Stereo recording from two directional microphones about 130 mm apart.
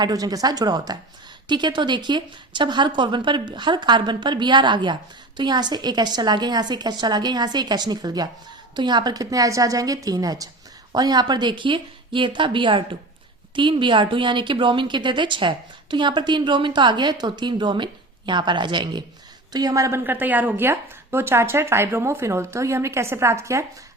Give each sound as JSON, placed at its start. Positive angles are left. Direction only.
{"t": 0.0, "sound": "a woman's voice", "side_deg": -30}